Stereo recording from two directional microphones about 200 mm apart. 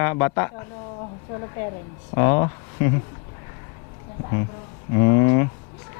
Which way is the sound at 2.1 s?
25° left (ahead or behind).